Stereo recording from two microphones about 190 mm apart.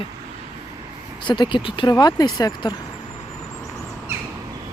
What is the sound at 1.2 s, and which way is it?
Speech, 25° left (ahead or behind).